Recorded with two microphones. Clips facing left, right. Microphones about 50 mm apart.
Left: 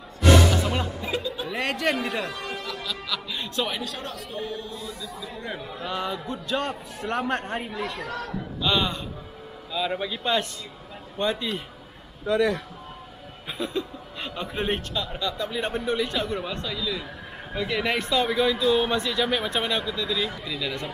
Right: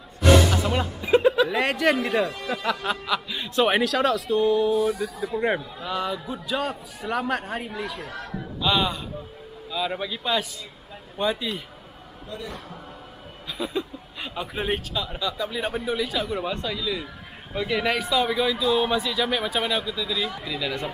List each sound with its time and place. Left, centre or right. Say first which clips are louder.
0.2 s music: right 1 dB; centre
1.2 s chuckle: right 12 dB; right
1.6 s a man's voice: right 4 dB; centre
2.2 s speech: right 3 dB; left
2.6 s music: right 7 dB; right
3.3 s a man's voice: even; centre
3.7 s speech: right 11 dB; right
4.7 s speech: right 12 dB; right
5.9 s speech: right 2 dB; centre
12.3 s a man's voice: left 13 dB; left
13.6 s a man's voice: right 1 dB; centre